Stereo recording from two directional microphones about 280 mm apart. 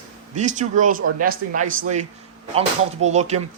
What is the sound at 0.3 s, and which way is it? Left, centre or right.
Speech, right.